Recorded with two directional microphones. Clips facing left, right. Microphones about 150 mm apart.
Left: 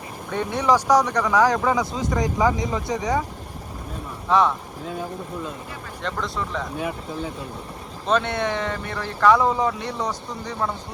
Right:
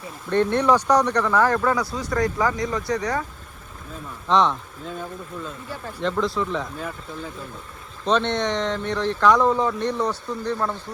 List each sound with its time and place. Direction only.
0.3 s speech: 10° left (ahead or behind)
4.3 s speech: 5° left (ahead or behind)
8.0 s speech: 5° left (ahead or behind)